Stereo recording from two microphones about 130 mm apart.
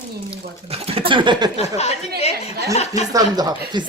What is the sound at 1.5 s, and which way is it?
Speech, 55° left (ahead or behind).